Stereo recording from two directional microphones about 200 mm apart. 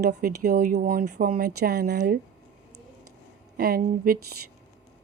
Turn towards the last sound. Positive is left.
turn(degrees=-45)  # may be behind; listen again after turning